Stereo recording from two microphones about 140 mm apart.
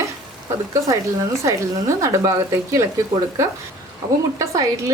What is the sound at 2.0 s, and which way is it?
Speech, 20° right (ahead or behind).